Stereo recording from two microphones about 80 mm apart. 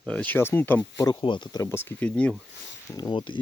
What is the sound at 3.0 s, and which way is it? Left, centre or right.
Speech, left.